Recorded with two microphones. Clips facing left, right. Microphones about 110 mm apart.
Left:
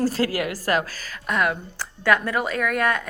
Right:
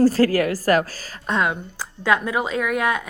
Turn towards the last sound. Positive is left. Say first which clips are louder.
# right 1 dB
turn(degrees=-15)  # may be behind; listen again after turning